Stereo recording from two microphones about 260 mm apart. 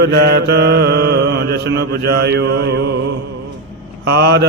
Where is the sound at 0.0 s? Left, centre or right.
Right.